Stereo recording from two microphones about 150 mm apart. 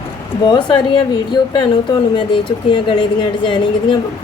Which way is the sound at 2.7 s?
35° left (ahead or behind).